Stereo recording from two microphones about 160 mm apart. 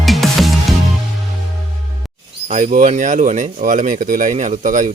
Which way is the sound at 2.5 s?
50° right (ahead or behind).